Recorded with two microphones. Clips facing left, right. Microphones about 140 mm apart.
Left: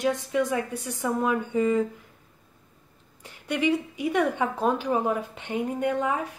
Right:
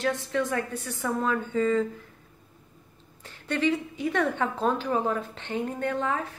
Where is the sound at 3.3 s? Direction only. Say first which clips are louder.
Left 1 dB; 10° left (ahead or behind).